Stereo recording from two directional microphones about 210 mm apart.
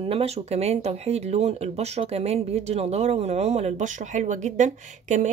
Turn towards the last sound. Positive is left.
turn(degrees=-35)  # may be behind; listen again after turning